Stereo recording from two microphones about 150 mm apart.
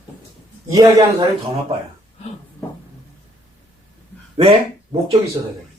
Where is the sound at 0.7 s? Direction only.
25° right (ahead or behind).